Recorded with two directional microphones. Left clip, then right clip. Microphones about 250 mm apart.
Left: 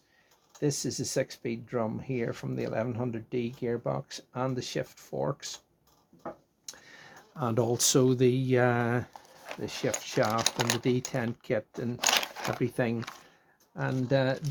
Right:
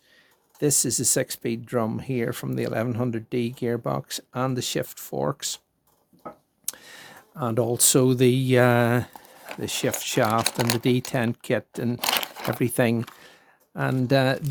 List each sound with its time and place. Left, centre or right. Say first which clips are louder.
0.6 s speech: right 7 dB; right
6.7 s a sound: right 8 dB; right
7.3 s speech: right 4 dB; centre; by 10.4 s right
10.4 s speech: right 4 dB; centre
10.8 s speech: right 6 dB; right
11.9 s a sound: even; centre
12.5 s speech: right 9 dB; right